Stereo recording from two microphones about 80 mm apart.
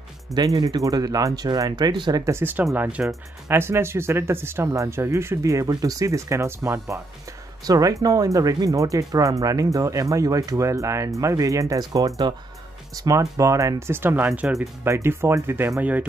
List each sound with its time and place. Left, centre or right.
0.3 s speech: right
2.2 s speech: right
3.1 s speech: right
7.6 s speech: right; by 14.5 s centre
14.9 s speech: right